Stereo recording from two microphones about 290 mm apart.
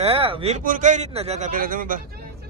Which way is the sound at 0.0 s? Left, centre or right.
Centre.